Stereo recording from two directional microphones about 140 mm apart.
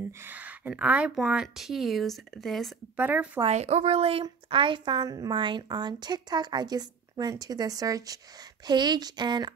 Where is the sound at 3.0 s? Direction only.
10° right (ahead or behind).